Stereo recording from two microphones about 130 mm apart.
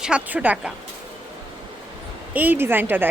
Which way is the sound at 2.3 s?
15° right (ahead or behind).